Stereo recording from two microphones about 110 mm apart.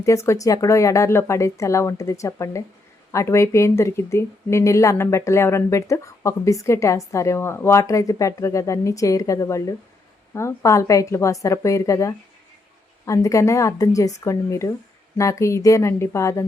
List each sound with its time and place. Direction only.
0.0 s speech: 25° left (ahead or behind)